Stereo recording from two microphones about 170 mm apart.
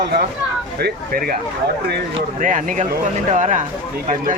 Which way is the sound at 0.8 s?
60° right (ahead or behind).